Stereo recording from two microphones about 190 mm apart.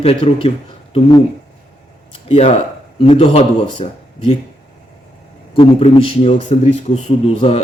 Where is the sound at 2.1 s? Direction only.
30° left (ahead or behind).